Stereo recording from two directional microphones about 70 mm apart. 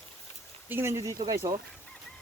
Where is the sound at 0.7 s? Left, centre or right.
Right.